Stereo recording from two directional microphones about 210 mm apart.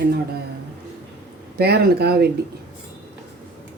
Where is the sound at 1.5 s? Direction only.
50° right (ahead or behind).